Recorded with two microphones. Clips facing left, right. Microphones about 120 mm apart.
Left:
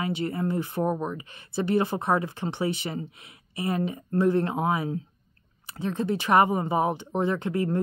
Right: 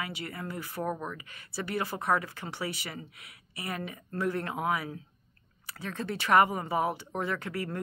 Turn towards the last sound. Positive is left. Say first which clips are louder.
# left 8 dB
turn(degrees=20)  # may be behind; listen again after turning